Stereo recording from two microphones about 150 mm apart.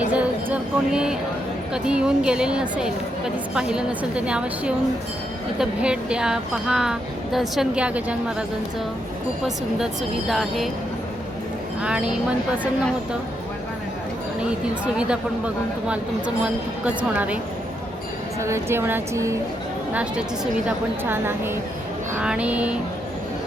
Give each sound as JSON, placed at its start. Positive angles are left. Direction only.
{"t": 0.0, "sound": "a sound", "side_deg": -10}
{"t": 1.7, "sound": "a woman's voice", "side_deg": -5}
{"t": 11.8, "sound": "a woman's voice", "side_deg": -5}
{"t": 14.9, "sound": "a woman's voice", "side_deg": -5}
{"t": 19.9, "sound": "a woman's voice", "side_deg": -5}